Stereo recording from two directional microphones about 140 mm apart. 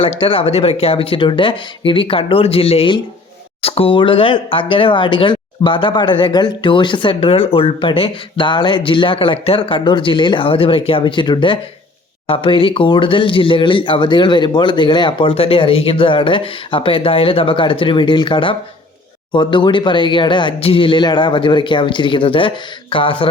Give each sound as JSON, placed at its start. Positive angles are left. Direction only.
{"t": 0.0, "sound": "speech", "side_deg": 40}